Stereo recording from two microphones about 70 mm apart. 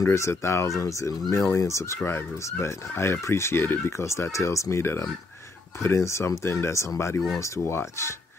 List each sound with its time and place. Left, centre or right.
0.0 s speech: left